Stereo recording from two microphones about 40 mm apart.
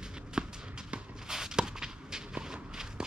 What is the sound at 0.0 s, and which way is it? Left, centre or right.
Run, centre.